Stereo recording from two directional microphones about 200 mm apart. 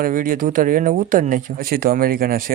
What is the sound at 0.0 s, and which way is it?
Speech, 45° right (ahead or behind).